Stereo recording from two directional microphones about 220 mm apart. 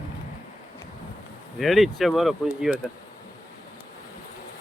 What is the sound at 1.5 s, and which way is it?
Speech, centre (ahead or behind).